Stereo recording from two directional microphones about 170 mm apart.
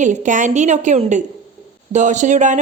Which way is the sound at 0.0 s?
45° right (ahead or behind).